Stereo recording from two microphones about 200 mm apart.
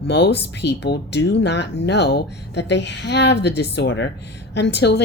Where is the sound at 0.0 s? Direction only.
55° left (ahead or behind).